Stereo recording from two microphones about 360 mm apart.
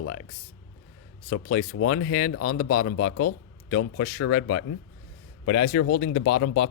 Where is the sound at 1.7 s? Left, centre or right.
Left.